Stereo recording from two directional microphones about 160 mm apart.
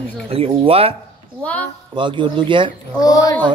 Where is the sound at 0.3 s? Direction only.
35° right (ahead or behind).